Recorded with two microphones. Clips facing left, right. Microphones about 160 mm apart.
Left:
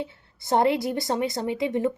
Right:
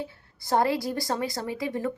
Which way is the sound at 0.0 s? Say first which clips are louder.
Left 2 dB; 20° left (ahead or behind).